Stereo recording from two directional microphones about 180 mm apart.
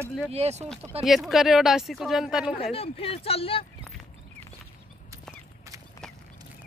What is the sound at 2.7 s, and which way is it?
Speech, 30° left (ahead or behind).